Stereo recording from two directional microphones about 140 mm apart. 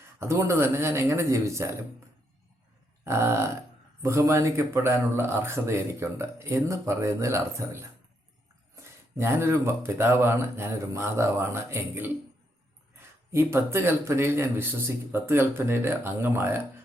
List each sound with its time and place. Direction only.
0.2 s speech: 20° right (ahead or behind)
3.0 s a man's voice: 20° right (ahead or behind)